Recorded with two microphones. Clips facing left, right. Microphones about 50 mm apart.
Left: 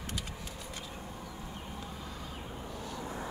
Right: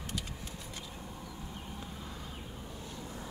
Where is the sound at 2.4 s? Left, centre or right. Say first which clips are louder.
Left 3 dB; centre.